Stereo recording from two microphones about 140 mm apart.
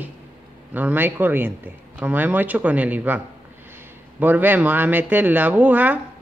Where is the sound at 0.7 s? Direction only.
15° right (ahead or behind).